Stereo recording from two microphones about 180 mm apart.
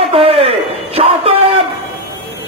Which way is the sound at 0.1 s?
30° right (ahead or behind).